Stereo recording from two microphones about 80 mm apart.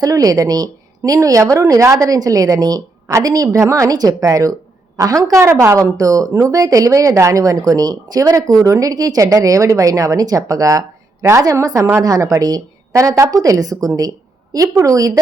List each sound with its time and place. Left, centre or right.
0.0 s a woman's voice: right